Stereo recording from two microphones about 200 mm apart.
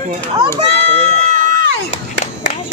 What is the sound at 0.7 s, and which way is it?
Run, 30° right (ahead or behind).